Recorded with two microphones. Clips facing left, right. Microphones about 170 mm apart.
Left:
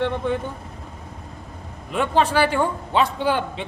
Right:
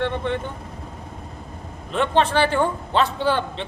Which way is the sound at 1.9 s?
10° left (ahead or behind).